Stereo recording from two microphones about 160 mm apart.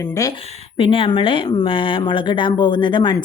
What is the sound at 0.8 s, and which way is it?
Speech, 35° left (ahead or behind).